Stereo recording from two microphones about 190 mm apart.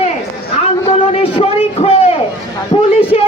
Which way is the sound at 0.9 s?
30° left (ahead or behind).